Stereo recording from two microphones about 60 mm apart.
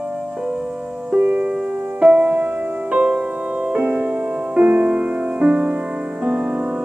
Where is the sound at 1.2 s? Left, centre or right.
Right.